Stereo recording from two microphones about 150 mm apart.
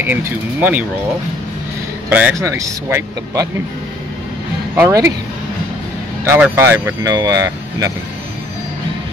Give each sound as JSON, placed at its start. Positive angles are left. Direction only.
{"t": 0.0, "sound": "speech", "side_deg": -10}
{"t": 2.0, "sound": "speech", "side_deg": -10}
{"t": 4.7, "sound": "speech", "side_deg": -15}
{"t": 6.2, "sound": "speech", "side_deg": -15}